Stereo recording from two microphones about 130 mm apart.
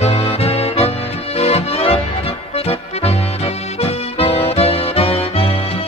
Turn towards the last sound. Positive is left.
turn(degrees=50)  # may be behind; listen again after turning